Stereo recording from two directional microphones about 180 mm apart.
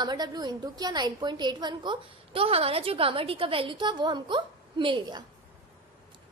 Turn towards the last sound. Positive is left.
turn(degrees=-25)  # may be behind; listen again after turning